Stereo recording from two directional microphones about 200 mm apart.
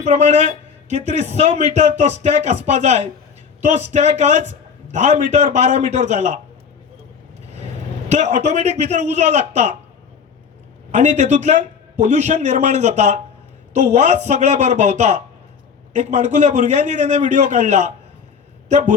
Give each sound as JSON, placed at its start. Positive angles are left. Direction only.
{"t": 0.0, "sound": "a man's voice", "side_deg": -35}
{"t": 8.1, "sound": "a man's voice", "side_deg": -35}
{"t": 10.9, "sound": "a man's voice", "side_deg": -35}